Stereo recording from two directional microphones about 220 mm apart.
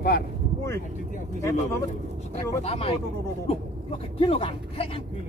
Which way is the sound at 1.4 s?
15° left (ahead or behind).